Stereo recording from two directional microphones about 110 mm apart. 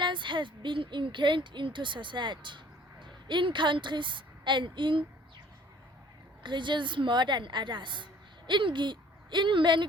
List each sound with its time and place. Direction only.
0.0 s a woman's voice: 45° right (ahead or behind)
6.4 s a woman's voice: 45° right (ahead or behind)